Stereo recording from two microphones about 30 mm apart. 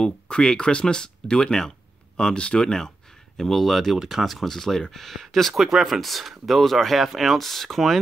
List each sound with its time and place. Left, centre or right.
0.3 s speech: left
2.3 s speech: left
3.3 s speech: centre
3.9 s speech: centre
4.5 s speech: centre
5.6 s speech: centre